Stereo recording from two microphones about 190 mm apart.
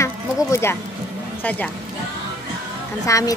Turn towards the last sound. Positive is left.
turn(degrees=15)  # may be behind; listen again after turning